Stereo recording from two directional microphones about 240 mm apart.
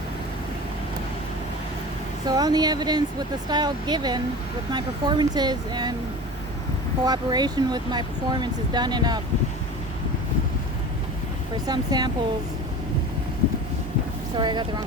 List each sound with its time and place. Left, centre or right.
2.2 s speech: centre
7.0 s speech: centre
11.6 s speech: centre
14.3 s speech: centre